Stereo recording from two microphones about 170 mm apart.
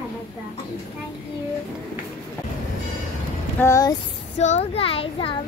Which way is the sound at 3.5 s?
20° left (ahead or behind).